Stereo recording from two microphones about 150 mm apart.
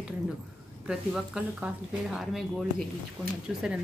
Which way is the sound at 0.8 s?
5° right (ahead or behind).